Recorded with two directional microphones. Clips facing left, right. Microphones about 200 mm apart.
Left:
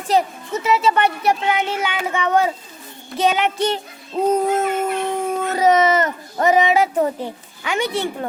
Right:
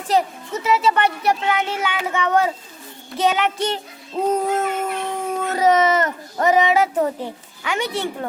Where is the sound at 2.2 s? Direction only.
10° left (ahead or behind).